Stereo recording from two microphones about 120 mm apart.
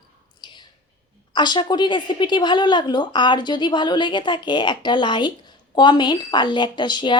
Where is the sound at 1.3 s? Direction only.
40° left (ahead or behind).